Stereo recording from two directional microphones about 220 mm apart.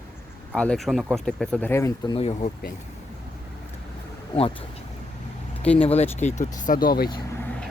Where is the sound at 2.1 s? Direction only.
25° left (ahead or behind).